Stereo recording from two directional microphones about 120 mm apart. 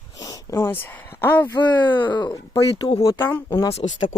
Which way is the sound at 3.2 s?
15° left (ahead or behind).